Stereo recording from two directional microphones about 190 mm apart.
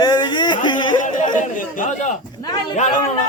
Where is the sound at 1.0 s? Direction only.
45° left (ahead or behind).